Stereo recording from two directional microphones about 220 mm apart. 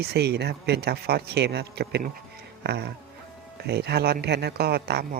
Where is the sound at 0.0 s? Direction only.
50° right (ahead or behind).